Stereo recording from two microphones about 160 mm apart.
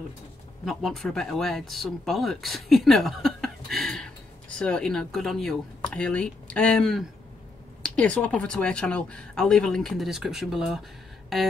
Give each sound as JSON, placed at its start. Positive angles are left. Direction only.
{"t": 0.7, "sound": "speech", "side_deg": 0}